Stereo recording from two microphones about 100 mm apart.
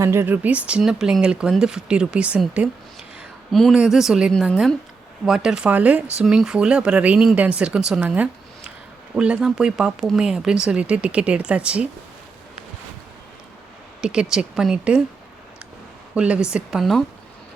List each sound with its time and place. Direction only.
0.0 s speech: 25° right (ahead or behind)
3.5 s speech: centre (ahead or behind)
14.0 s speech: 5° right (ahead or behind)
16.1 s speech: 10° right (ahead or behind)